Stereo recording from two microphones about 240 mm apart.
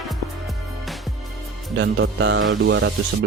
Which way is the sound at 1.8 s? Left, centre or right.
Right.